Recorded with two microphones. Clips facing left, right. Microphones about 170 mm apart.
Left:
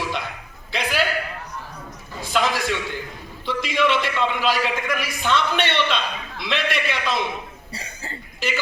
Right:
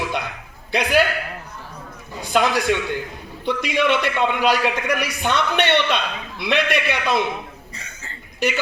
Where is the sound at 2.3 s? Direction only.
50° right (ahead or behind).